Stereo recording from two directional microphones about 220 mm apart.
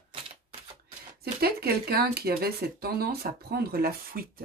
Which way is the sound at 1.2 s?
45° right (ahead or behind).